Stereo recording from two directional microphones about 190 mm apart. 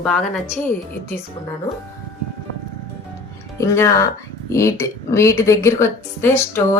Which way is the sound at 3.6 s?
15° left (ahead or behind).